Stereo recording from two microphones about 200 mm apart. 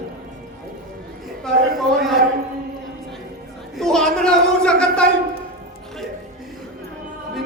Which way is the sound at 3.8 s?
Centre (ahead or behind).